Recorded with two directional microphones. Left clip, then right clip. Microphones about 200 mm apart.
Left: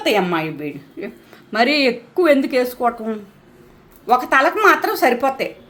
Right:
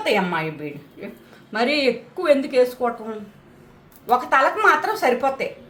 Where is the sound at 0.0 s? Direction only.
35° left (ahead or behind).